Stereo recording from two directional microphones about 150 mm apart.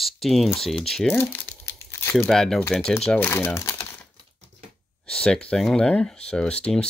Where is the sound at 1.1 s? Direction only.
15° left (ahead or behind).